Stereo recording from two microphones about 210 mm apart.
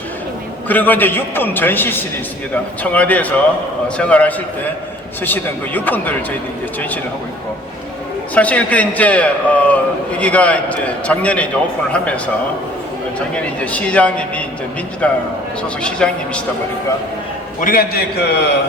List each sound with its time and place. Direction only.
0.7 s a man's voice: 10° left (ahead or behind)
8.4 s a man's voice: 5° left (ahead or behind)
13.3 s a man's voice: 5° left (ahead or behind)
17.6 s a man's voice: 45° left (ahead or behind)